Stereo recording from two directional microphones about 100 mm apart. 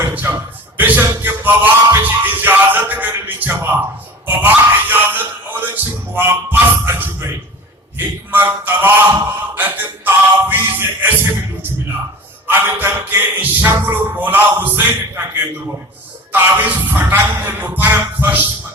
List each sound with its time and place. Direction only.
0.0 s music: 20° right (ahead or behind)
4.3 s a sound: 20° right (ahead or behind)
7.9 s speech: 20° right (ahead or behind)
9.6 s music: 15° right (ahead or behind)
12.5 s music: 20° right (ahead or behind)
16.3 s music: 20° right (ahead or behind)